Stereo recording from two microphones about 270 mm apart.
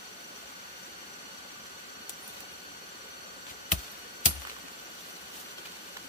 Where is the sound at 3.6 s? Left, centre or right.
Left.